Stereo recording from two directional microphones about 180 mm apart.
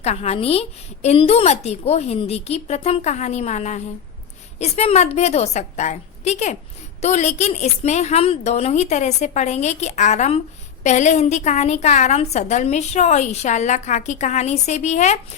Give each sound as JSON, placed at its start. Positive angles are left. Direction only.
{"t": 0.0, "sound": "a woman's voice", "side_deg": 35}